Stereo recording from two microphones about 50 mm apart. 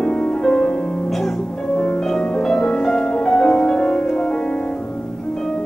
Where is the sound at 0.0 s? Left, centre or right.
Centre.